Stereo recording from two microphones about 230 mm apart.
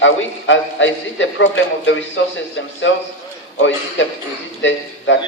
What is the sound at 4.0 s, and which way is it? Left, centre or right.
Speech, left.